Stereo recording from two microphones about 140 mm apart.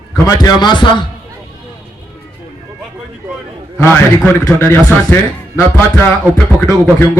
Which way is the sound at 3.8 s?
10° left (ahead or behind).